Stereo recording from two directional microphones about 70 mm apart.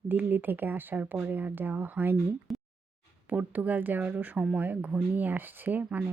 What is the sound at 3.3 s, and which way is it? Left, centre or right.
Speech, right.